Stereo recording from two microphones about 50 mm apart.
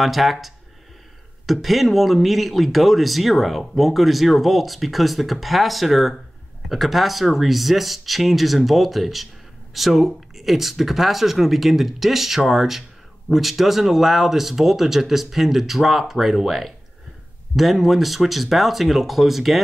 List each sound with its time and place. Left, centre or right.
0.0 s speech: centre